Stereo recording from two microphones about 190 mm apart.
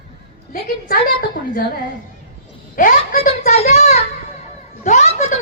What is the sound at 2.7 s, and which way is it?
Speech, 45° left (ahead or behind).